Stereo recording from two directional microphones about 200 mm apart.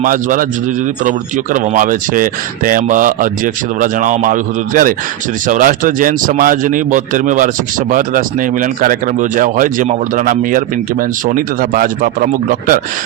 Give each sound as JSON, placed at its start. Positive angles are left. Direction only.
{"t": 0.0, "sound": "speech", "side_deg": -40}
{"t": 1.5, "sound": "speech", "side_deg": -40}